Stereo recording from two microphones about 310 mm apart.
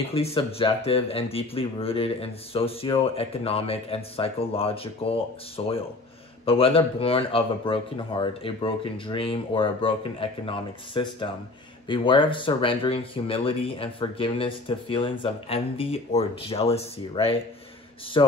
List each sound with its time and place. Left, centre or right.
0.1 s speech: centre